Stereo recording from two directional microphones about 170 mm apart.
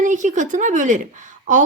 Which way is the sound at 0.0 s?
45° right (ahead or behind).